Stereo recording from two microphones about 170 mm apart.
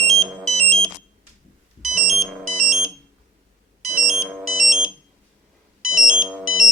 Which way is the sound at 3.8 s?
Centre (ahead or behind).